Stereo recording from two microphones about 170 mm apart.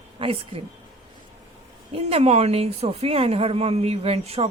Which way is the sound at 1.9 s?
35° right (ahead or behind).